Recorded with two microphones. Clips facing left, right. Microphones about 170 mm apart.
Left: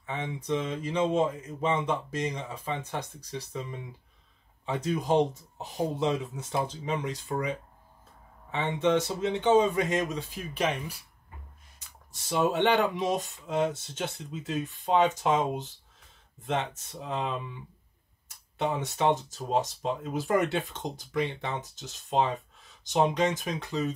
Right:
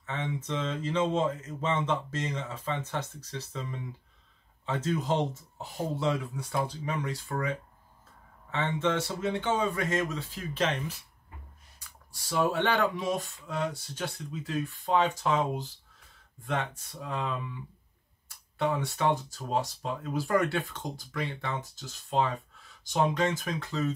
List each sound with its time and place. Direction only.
0.0 s speech: 15° left (ahead or behind)
4.6 s speech: 15° left (ahead or behind)